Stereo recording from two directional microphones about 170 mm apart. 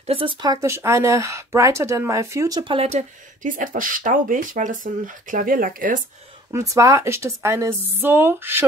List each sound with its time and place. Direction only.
0.0 s speech: 35° right (ahead or behind); by 5.9 s 55° right (ahead or behind)
6.5 s speech: 20° right (ahead or behind)